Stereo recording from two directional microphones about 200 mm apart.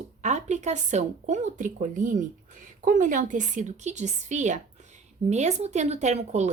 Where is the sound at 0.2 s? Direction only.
35° right (ahead or behind).